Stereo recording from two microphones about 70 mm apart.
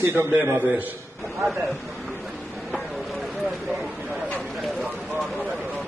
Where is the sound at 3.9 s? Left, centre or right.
Right.